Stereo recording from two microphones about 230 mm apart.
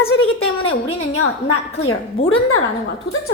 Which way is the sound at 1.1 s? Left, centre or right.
Left.